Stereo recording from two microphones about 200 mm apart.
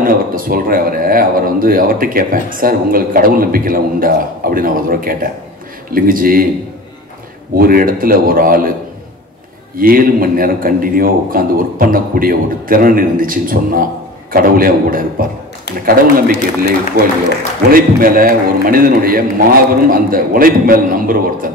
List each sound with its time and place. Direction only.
0.0 s speech: 45° right (ahead or behind)
7.5 s speech: 45° right (ahead or behind)
9.8 s speech: 45° right (ahead or behind)